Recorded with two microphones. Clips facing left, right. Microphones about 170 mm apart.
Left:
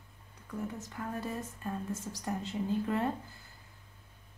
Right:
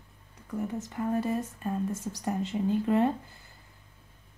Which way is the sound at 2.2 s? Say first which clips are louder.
Right 7 dB; 20° right (ahead or behind).